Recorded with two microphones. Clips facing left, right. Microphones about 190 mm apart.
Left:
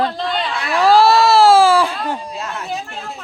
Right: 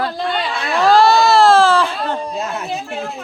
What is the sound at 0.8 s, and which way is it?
Baby cry, 5° left (ahead or behind).